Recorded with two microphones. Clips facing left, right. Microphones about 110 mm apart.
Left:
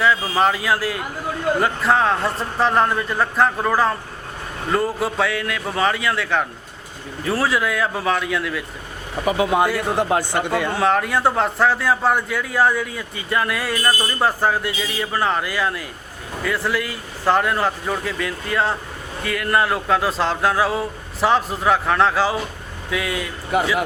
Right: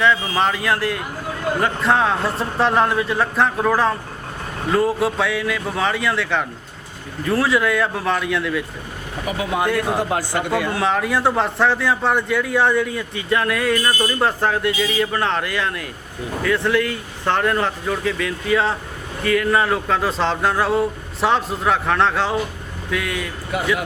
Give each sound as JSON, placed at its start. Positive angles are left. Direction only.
{"t": 0.0, "sound": "a man's voice", "side_deg": 5}
{"t": 9.2, "sound": "speech", "side_deg": 30}
{"t": 10.7, "sound": "a man's voice", "side_deg": 0}